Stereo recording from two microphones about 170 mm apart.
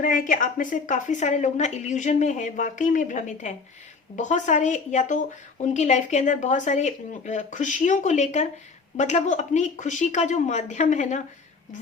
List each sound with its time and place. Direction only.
0.0 s a woman's voice: 55° left (ahead or behind)